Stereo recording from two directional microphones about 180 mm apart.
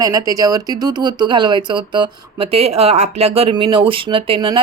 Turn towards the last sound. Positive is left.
turn(degrees=-25)  # may be behind; listen again after turning